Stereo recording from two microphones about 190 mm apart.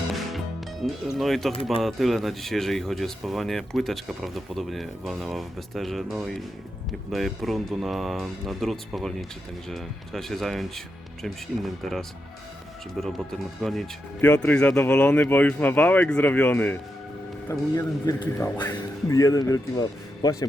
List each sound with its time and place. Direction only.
0.1 s music: centre (ahead or behind)
1.6 s speech: centre (ahead or behind); by 20.5 s 20° left (ahead or behind)